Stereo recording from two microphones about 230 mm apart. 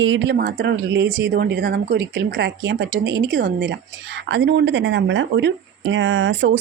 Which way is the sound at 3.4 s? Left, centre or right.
Right.